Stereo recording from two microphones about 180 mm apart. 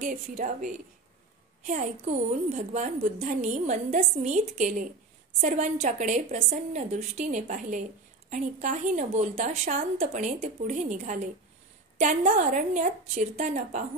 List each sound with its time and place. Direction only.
0.0 s a woman's voice: 40° right (ahead or behind)